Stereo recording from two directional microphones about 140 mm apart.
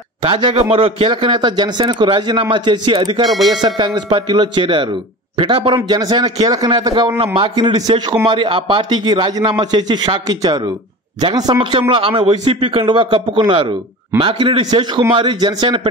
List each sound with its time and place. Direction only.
0.2 s a man's voice: 35° right (ahead or behind)